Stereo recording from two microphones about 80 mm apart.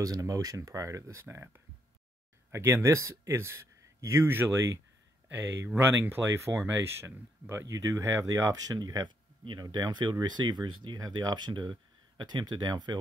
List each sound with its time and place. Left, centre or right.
0.0 s speech: right
1.2 s speech: right
7.6 s speech: right
9.4 s speech: right
11.0 s speech: right